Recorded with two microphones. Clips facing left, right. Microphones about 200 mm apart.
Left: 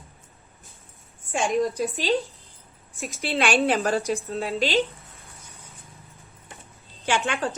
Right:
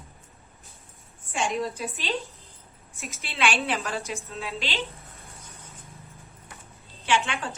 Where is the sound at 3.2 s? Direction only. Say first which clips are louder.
Left 6 dB; 45° left (ahead or behind).